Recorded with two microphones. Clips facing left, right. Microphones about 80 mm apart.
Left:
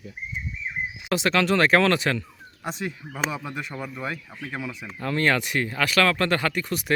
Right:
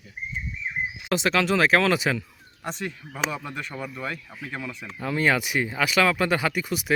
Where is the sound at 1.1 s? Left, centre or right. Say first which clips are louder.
Left 1 dB; centre.